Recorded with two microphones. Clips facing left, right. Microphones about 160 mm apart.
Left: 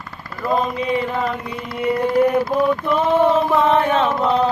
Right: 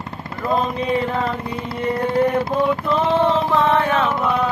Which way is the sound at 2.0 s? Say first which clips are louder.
Left 2 dB; 25° right (ahead or behind).